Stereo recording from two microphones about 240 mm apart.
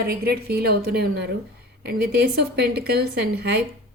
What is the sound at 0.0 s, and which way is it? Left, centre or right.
A woman's voice, right.